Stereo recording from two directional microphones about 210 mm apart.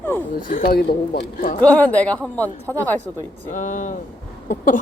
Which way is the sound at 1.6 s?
10° left (ahead or behind).